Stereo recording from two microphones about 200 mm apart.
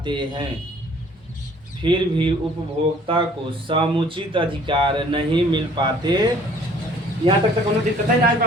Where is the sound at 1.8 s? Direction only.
25° right (ahead or behind).